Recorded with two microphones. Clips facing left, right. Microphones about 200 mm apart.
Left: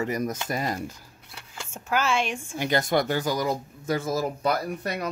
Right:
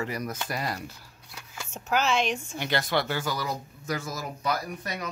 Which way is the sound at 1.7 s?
10° left (ahead or behind).